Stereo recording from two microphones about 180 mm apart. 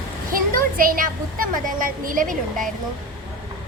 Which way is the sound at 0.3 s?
50° right (ahead or behind).